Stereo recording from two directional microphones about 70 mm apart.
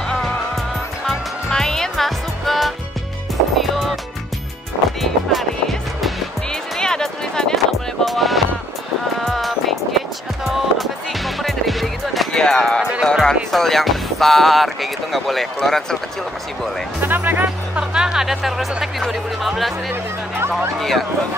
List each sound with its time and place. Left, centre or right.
1.0 s music: centre
5.0 s music: centre
13.0 s speech: centre
17.0 s speech: right
17.7 s speech: centre
19.9 s speech: right